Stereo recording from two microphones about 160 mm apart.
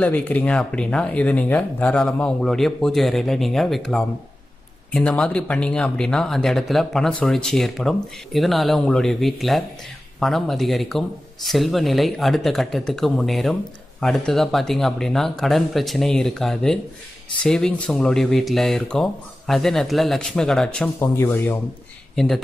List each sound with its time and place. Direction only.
0.0 s speech: 10° left (ahead or behind)
21.0 s speech: 15° left (ahead or behind)
22.1 s speech: centre (ahead or behind)